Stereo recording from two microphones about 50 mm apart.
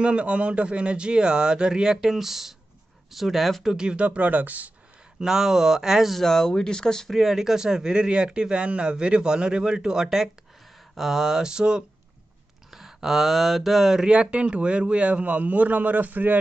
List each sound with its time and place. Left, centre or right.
0.0 s speech: right; by 3.7 s centre
3.7 s a man's voice: centre
5.2 s speech: centre
6.1 s speech: centre
7.2 s speech: centre
14.0 s a man's voice: centre; by 16.3 s right